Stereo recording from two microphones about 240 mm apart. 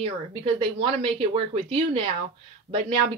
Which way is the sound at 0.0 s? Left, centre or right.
Right.